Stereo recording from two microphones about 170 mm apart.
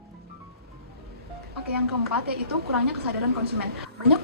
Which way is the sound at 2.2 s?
70° right (ahead or behind).